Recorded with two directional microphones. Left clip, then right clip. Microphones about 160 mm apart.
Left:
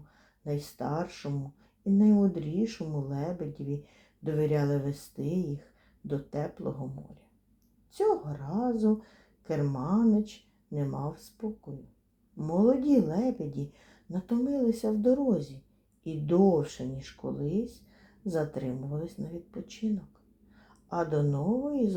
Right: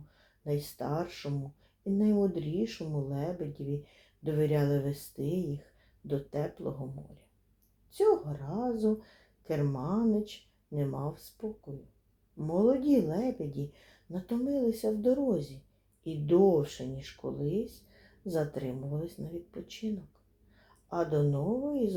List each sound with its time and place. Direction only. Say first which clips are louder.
0.4 s a woman's voice: even; 15° left (ahead or behind)